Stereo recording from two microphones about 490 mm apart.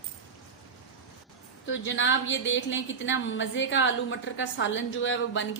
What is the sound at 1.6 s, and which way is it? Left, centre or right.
A woman's voice, left.